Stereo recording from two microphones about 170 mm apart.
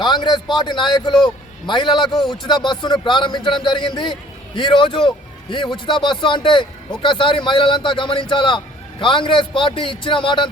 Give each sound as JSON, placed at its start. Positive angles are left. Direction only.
{"t": 0.0, "sound": "a man's voice", "side_deg": 25}